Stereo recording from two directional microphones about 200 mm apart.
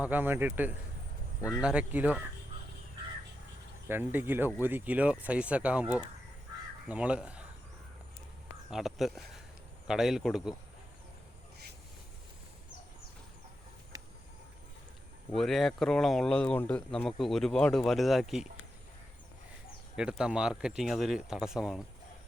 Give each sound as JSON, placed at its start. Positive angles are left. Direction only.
{"t": 0.0, "sound": "speech", "side_deg": -10}
{"t": 1.4, "sound": "speech", "side_deg": 15}
{"t": 1.6, "sound": "speech", "side_deg": -5}
{"t": 3.8, "sound": "speech", "side_deg": -10}
{"t": 8.7, "sound": "speech", "side_deg": 0}
{"t": 13.9, "sound": "a sound", "side_deg": -20}
{"t": 15.4, "sound": "speech", "side_deg": 0}
{"t": 20.0, "sound": "speech", "side_deg": -5}